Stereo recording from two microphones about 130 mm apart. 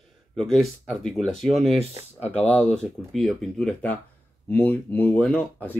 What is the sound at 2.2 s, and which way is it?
Speech, 55° left (ahead or behind).